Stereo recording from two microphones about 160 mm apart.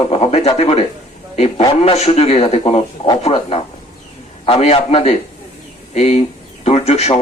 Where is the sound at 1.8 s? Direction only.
40° left (ahead or behind).